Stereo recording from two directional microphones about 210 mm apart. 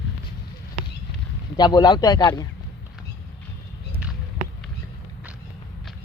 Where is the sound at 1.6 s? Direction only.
20° left (ahead or behind).